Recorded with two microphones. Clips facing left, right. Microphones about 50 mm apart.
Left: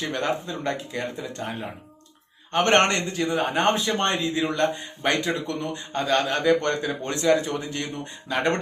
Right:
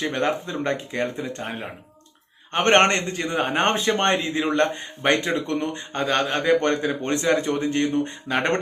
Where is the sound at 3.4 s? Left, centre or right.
Right.